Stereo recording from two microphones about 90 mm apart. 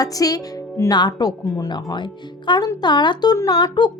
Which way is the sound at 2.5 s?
65° left (ahead or behind).